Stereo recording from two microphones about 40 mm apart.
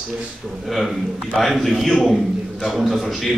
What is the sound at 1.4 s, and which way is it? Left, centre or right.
A man's voice, centre.